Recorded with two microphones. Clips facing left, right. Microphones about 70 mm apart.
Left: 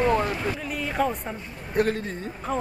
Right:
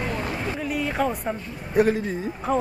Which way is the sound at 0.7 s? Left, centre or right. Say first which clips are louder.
Right 2 dB; centre.